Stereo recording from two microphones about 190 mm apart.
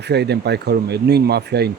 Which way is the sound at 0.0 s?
60° right (ahead or behind).